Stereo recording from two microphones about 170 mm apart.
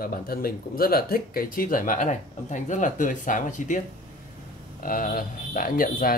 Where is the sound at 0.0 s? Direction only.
60° left (ahead or behind).